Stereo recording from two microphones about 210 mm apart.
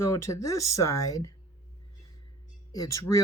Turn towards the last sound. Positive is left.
turn(degrees=15)  # may be behind; listen again after turning